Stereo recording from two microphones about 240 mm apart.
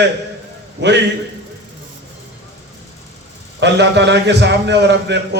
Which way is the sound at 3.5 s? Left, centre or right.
Right.